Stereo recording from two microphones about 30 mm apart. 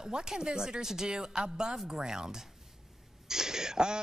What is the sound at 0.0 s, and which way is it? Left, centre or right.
Speech, right.